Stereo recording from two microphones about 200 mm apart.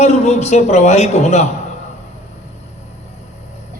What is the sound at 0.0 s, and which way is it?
A man's voice, 35° left (ahead or behind).